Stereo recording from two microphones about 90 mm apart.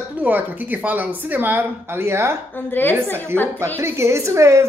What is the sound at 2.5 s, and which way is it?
Speech, 20° left (ahead or behind).